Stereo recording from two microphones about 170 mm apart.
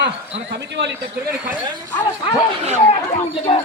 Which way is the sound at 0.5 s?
85° right.